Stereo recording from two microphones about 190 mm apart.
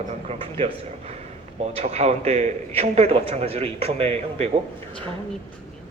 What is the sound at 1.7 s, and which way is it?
Speech, 35° right (ahead or behind).